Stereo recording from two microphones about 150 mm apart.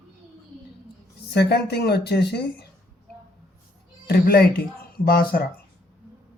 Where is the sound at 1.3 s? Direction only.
90° left.